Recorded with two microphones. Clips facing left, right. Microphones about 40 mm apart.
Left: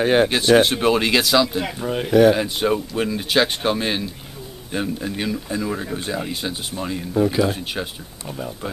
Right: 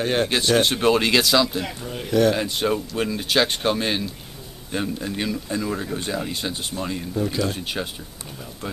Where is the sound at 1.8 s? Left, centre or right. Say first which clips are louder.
Left 8 dB; left.